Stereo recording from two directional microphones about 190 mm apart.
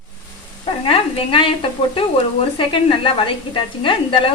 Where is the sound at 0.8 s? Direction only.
25° left (ahead or behind).